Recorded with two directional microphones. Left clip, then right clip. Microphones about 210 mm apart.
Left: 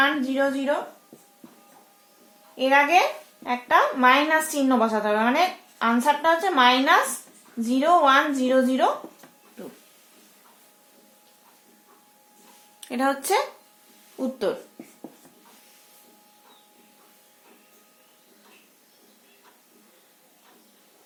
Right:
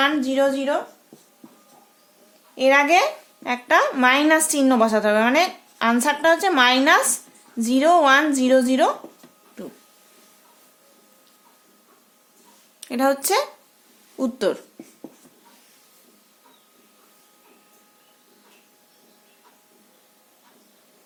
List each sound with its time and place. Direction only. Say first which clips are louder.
0.0 s a woman's voice: right 3 dB; 45° right (ahead or behind)
2.6 s a woman's voice: right 2 dB; 45° right (ahead or behind)
12.8 s a woman's voice: right 4 dB; 30° right (ahead or behind)